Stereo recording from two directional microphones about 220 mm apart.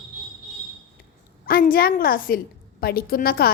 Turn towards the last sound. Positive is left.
turn(degrees=45)  # may be behind; listen again after turning